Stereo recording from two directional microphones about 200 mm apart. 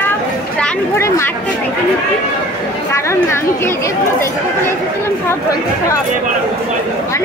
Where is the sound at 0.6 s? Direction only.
10° left (ahead or behind).